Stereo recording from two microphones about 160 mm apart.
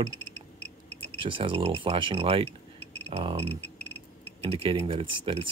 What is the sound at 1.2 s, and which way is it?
Speech, 30° right (ahead or behind).